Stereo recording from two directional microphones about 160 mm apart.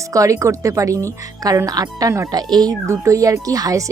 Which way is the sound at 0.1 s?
20° right (ahead or behind).